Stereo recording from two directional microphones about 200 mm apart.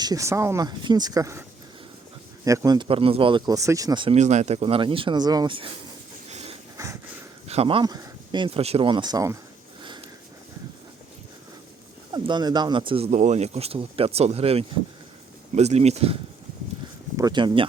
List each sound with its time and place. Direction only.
0.0 s speech: 15° right (ahead or behind)
6.2 s a sound: 30° right (ahead or behind)
6.7 s a sound: 15° right (ahead or behind)
7.4 s speech: 30° right (ahead or behind)
12.1 s speech: 20° right (ahead or behind)
17.2 s speech: 20° right (ahead or behind)